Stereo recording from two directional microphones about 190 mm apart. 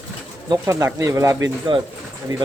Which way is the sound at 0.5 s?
15° right (ahead or behind).